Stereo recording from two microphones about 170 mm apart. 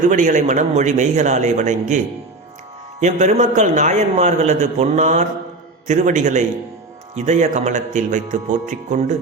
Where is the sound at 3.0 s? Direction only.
45° right (ahead or behind).